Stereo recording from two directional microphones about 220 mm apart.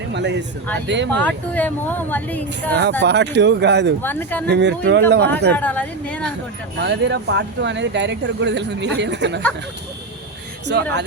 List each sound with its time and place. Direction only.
0.1 s speech: 55° right (ahead or behind)
1.2 s speech: 5° left (ahead or behind)
3.0 s speech: 50° right (ahead or behind)
4.0 s speech: 10° left (ahead or behind)
4.4 s speech: 50° right (ahead or behind)
5.5 s speech: 5° left (ahead or behind)
6.8 s speech: 50° right (ahead or behind)
10.7 s speech: 50° right (ahead or behind)